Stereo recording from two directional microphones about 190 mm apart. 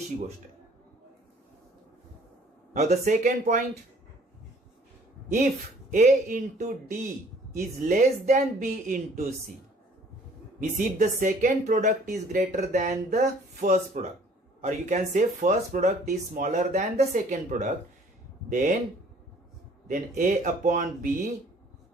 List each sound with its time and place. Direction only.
2.7 s speech: 40° right (ahead or behind)
5.3 s speech: 40° right (ahead or behind)
10.6 s speech: 40° right (ahead or behind)
12.1 s speech: 55° right (ahead or behind)
12.4 s speech: 40° right (ahead or behind)
19.9 s speech: 40° right (ahead or behind)